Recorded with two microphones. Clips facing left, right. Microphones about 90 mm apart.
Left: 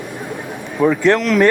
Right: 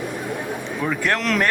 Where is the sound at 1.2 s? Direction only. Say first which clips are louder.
Left 6 dB; centre (ahead or behind).